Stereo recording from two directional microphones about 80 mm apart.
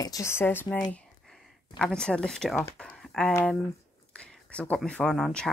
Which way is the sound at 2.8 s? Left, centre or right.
Centre.